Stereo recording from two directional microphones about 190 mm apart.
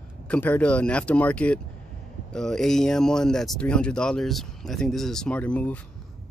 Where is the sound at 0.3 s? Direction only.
5° left (ahead or behind).